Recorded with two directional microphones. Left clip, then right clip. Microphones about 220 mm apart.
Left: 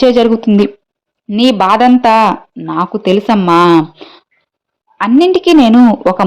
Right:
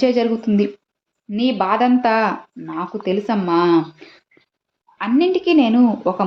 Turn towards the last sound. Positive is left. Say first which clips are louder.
# left 9 dB
turn(degrees=40)  # may be behind; listen again after turning